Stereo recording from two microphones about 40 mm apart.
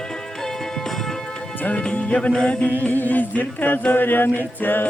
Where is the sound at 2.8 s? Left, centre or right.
Left.